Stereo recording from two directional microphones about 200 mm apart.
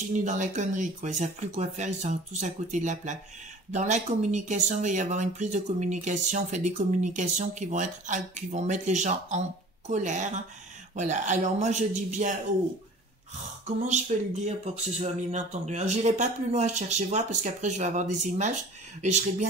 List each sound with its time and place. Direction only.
0.1 s speech: 40° right (ahead or behind)
13.7 s speech: 35° right (ahead or behind)